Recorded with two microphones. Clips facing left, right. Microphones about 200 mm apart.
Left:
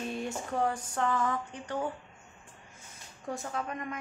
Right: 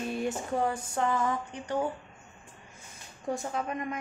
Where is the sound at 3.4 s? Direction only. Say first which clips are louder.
Right 3 dB; 15° right (ahead or behind).